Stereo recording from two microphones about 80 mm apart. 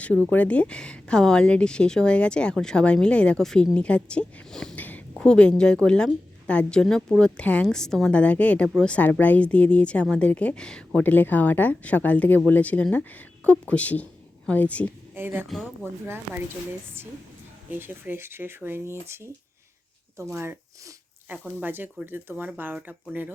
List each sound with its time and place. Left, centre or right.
0.0 s speech: centre
4.8 s a sound: left
5.2 s speech: centre
11.0 s speech: left
15.1 s speech: right
15.4 s speech: centre
16.0 s speech: right
17.7 s speech: right